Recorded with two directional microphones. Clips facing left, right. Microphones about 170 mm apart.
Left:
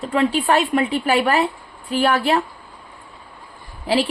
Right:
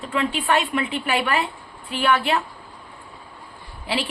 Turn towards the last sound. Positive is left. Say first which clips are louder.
# left 7 dB
turn(degrees=40)  # may be behind; listen again after turning